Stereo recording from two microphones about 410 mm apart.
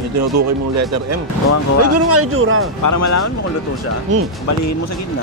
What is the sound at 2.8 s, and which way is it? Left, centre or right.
Speech, left.